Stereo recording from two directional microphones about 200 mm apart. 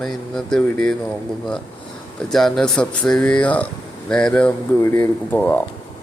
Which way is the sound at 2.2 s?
Centre (ahead or behind).